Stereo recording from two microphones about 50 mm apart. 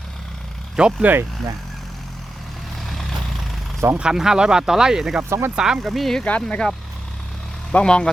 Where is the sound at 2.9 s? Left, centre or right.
Centre.